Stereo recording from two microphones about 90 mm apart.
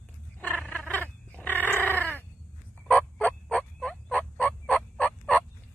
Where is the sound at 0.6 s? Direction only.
15° left (ahead or behind).